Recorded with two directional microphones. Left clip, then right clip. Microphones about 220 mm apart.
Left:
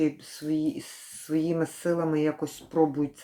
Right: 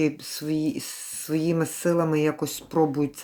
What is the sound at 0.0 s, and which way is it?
Speech, 40° right (ahead or behind).